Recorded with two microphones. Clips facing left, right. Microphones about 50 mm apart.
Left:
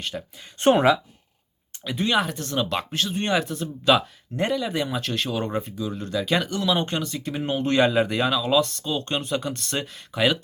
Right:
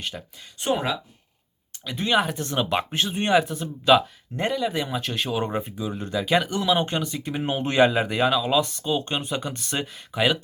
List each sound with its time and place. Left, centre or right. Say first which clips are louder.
0.0 s speech: left 2 dB; centre
1.8 s speech: left 3 dB; centre
2.0 s speech: right 2 dB; centre
3.2 s speech: right 6 dB; centre